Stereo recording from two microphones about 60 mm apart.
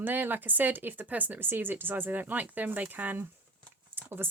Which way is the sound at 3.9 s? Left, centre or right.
Right.